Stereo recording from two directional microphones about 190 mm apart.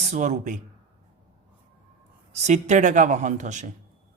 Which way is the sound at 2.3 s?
40° right (ahead or behind).